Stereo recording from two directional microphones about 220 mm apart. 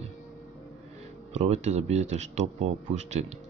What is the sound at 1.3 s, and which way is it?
Speech, 30° right (ahead or behind).